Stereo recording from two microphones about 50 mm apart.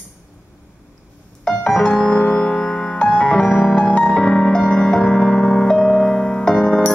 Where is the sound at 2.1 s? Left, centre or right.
Left.